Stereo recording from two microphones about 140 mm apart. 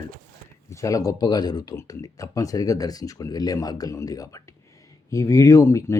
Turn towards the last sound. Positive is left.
turn(degrees=20)  # may be behind; listen again after turning